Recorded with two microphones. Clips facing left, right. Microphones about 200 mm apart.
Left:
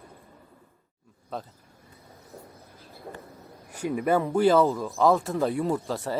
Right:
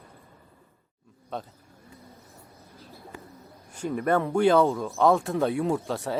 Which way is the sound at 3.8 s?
5° left (ahead or behind).